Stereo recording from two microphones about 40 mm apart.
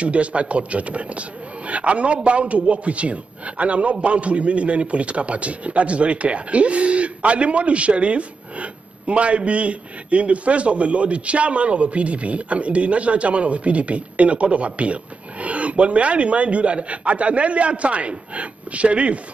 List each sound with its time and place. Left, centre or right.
0.0 s a man's voice: right